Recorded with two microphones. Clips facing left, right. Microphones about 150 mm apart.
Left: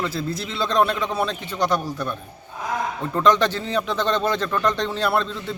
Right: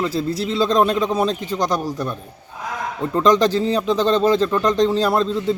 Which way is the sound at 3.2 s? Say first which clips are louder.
Right 4 dB; 35° right (ahead or behind).